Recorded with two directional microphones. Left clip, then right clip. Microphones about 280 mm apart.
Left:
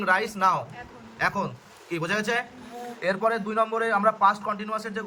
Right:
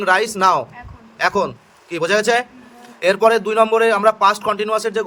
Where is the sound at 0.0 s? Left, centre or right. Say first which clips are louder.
Right 8 dB; right.